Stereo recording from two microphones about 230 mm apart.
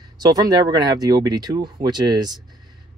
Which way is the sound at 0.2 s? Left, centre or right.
Centre.